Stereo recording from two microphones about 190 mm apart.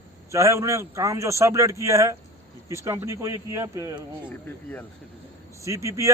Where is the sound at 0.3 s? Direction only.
15° right (ahead or behind).